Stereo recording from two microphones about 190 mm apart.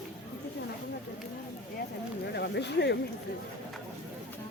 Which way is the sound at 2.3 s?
60° left (ahead or behind).